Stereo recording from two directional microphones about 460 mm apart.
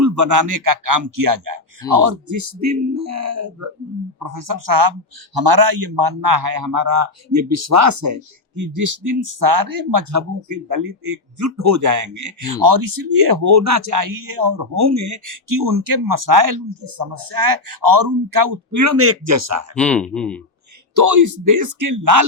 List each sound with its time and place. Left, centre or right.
0.0 s a man's voice: right
4.2 s a man's voice: right
19.7 s speech: centre
20.9 s a man's voice: right